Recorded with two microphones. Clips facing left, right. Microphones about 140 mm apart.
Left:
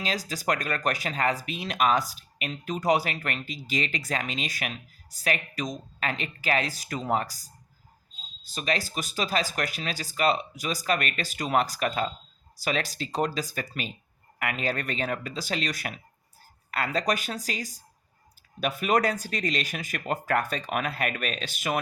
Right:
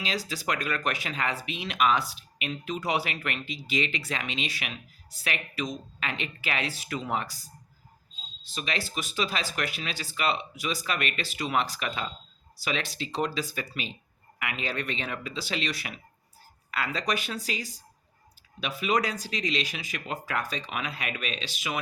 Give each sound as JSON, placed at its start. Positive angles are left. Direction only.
{"t": 0.0, "sound": "speech", "side_deg": 45}